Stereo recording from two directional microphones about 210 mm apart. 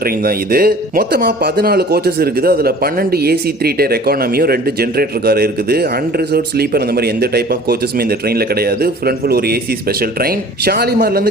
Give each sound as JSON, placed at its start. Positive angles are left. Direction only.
{"t": 0.0, "sound": "speech", "side_deg": -45}